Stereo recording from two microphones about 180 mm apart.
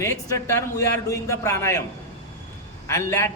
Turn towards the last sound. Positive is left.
turn(degrees=15)  # may be behind; listen again after turning